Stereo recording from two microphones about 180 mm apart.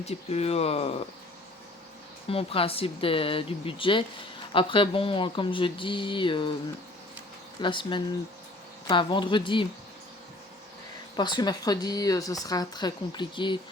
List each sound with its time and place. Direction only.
0.0 s speech: 35° left (ahead or behind)
2.3 s speech: 30° left (ahead or behind)
7.6 s speech: 25° left (ahead or behind)
11.2 s speech: 25° left (ahead or behind)